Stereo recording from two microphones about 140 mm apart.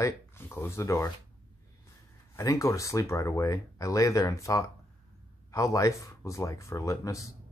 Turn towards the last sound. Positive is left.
turn(degrees=20)  # may be behind; listen again after turning